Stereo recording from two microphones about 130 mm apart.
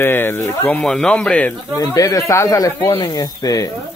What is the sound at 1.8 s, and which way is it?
Speech, 25° left (ahead or behind).